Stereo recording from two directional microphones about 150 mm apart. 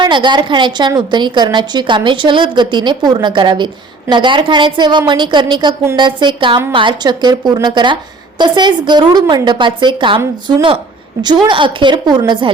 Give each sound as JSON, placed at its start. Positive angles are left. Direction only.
{"t": 0.0, "sound": "a woman's voice", "side_deg": -30}
{"t": 11.4, "sound": "a woman's voice", "side_deg": -35}